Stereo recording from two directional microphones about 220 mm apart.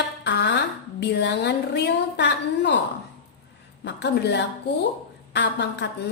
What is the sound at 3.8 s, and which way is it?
A woman's voice, 50° left (ahead or behind).